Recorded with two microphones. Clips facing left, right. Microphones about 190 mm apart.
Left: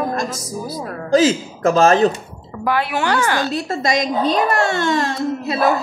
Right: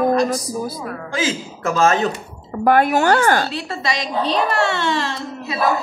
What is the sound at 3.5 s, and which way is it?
A woman's voice, 45° left (ahead or behind).